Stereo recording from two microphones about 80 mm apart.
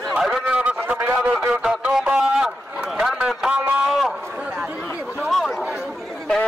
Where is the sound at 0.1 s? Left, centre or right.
Centre.